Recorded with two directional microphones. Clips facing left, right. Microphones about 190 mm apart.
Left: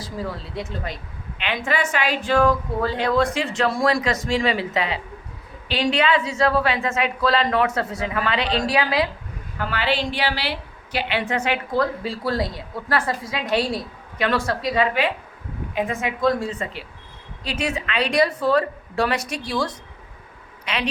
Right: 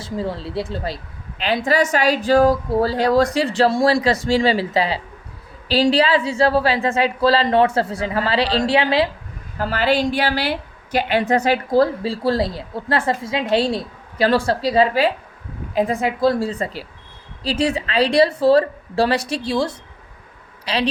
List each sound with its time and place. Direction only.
0.0 s a woman's voice: 25° right (ahead or behind)
9.6 s a woman's voice: 40° right (ahead or behind)